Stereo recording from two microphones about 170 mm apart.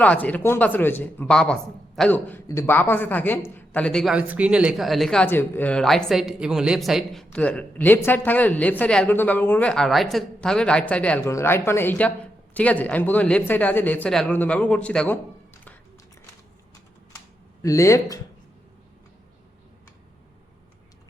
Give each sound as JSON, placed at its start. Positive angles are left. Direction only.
{"t": 0.0, "sound": "a man's voice", "side_deg": 10}
{"t": 17.6, "sound": "speech", "side_deg": 20}